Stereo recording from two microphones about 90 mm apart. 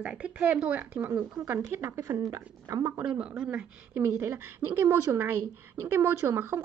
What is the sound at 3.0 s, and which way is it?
Speech, 10° right (ahead or behind).